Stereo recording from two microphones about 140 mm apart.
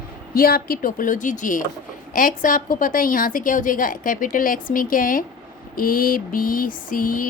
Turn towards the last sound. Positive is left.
turn(degrees=75)  # may be behind; listen again after turning